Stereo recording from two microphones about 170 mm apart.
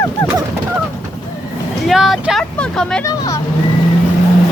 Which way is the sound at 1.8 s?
Centre (ahead or behind).